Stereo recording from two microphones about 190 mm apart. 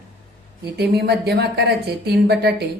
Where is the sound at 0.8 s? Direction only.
55° right (ahead or behind).